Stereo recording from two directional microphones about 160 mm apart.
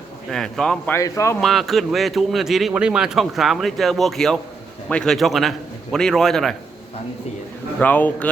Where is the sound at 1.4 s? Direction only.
Centre (ahead or behind).